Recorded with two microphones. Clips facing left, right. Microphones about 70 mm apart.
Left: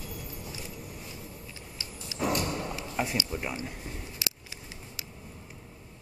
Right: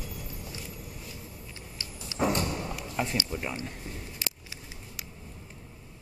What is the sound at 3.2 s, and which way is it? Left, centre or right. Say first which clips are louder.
Speech: even; centre.